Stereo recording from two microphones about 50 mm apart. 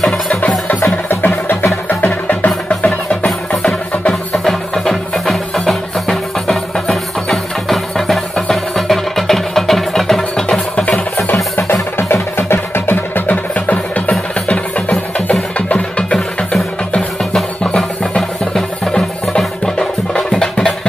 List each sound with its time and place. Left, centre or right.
1.0 s music: left
4.1 s music: centre
11.6 s music: left
13.3 s music: left
17.2 s music: centre
17.6 s music: left